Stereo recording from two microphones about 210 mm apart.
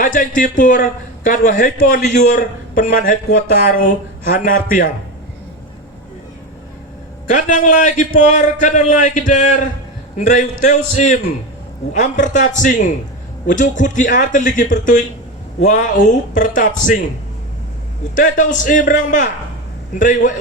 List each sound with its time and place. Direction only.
0.0 s a man's voice: 40° left (ahead or behind)
7.3 s a man's voice: 35° left (ahead or behind)
18.1 s a man's voice: 40° left (ahead or behind)